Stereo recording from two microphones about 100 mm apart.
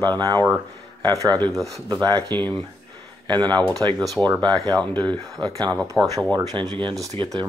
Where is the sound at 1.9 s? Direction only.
45° right (ahead or behind).